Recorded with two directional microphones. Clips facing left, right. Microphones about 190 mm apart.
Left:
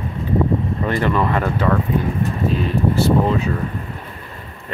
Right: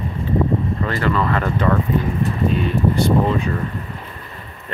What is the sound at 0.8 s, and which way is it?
Speech, 15° left (ahead or behind).